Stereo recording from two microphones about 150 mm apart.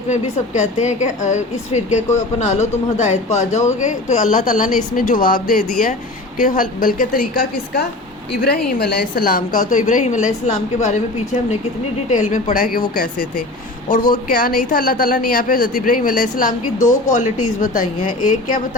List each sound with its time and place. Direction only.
0.1 s a woman's voice: 55° left (ahead or behind); by 7.9 s 75° left (ahead or behind)
8.4 s a woman's voice: 90° left; by 11.0 s 55° left (ahead or behind)
12.1 s a woman's voice: 55° left (ahead or behind)